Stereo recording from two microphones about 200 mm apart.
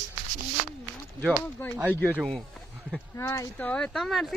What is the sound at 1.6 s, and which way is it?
Speech, 10° left (ahead or behind).